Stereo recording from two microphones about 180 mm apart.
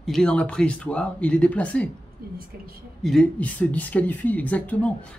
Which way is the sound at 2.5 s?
55° right (ahead or behind).